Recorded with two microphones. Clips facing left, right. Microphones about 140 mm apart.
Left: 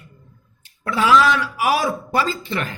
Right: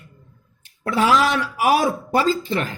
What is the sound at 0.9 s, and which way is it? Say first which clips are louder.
Speech: left 2 dB; 45° right (ahead or behind).